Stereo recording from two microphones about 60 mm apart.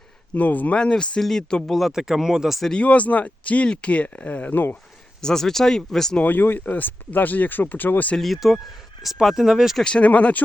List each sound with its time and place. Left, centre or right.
0.3 s speech: left; by 1.9 s centre
1.9 s speech: centre
2.7 s speech: left
5.2 s speech: centre
6.2 s speech: left
8.2 s speech: centre
9.8 s speech: centre